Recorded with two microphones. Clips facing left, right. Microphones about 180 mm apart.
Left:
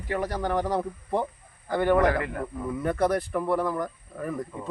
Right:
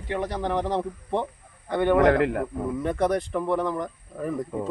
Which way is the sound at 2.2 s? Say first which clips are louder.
Right 8 dB; 70° right (ahead or behind).